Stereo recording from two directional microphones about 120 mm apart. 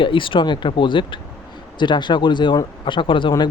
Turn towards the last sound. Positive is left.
turn(degrees=45)  # may be behind; listen again after turning